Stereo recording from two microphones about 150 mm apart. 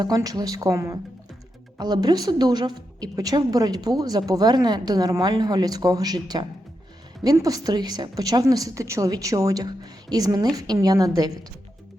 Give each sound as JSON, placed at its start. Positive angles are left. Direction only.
{"t": 0.0, "sound": "a woman's voice", "side_deg": -25}